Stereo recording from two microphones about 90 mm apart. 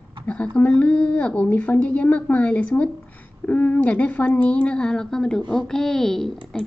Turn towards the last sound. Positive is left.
turn(degrees=5)  # may be behind; listen again after turning